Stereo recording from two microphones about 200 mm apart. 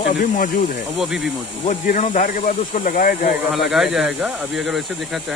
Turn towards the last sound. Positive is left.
turn(degrees=0)  # may be behind; listen again after turning